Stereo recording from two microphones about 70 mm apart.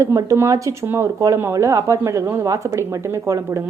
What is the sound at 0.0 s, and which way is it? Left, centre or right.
A woman's voice, right.